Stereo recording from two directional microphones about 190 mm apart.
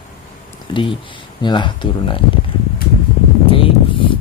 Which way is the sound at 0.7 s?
25° left (ahead or behind).